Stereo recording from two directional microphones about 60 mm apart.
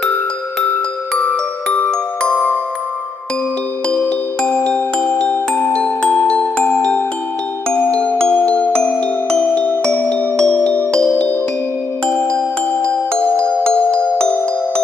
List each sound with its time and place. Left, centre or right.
2.3 s music: left
3.9 s music: left
12.8 s music: left